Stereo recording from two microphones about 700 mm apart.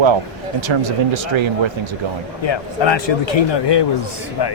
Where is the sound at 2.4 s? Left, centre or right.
Left.